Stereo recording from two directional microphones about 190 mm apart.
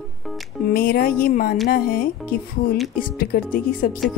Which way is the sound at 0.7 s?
50° left (ahead or behind).